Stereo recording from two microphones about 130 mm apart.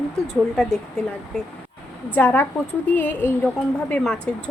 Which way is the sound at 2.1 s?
15° left (ahead or behind).